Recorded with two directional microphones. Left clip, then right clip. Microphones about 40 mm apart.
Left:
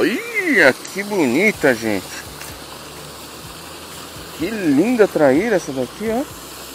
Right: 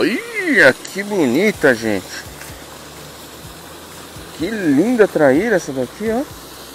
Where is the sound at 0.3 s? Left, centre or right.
Right.